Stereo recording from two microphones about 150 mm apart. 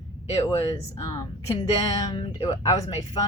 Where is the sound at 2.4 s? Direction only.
25° left (ahead or behind).